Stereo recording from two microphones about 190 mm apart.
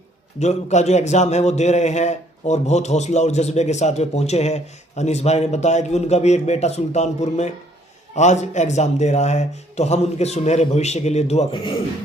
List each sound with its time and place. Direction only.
0.3 s a man's voice: 35° left (ahead or behind)